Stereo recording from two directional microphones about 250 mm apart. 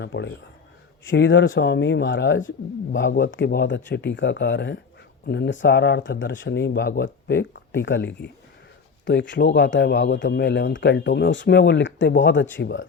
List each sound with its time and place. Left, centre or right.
0.0 s speech: left